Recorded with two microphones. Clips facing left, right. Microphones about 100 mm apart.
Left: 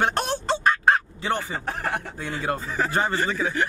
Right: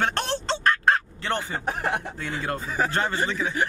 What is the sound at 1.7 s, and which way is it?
Speech, 20° right (ahead or behind).